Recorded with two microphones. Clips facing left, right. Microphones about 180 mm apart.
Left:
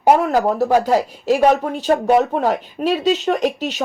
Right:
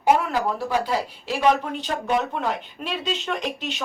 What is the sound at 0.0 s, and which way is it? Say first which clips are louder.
Speech: left 6 dB; 45° left (ahead or behind).